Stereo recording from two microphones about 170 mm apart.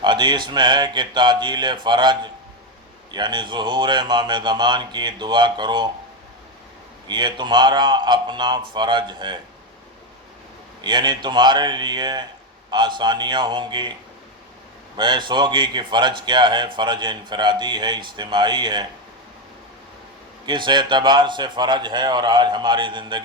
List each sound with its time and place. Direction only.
0.0 s a man's voice: 25° right (ahead or behind)
7.1 s a man's voice: 25° right (ahead or behind)
10.8 s a man's voice: 25° right (ahead or behind)
14.9 s a man's voice: 25° right (ahead or behind)
20.4 s a man's voice: 30° right (ahead or behind)